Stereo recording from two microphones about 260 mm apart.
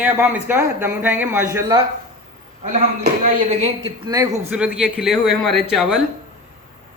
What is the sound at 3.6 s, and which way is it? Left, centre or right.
Speech, right.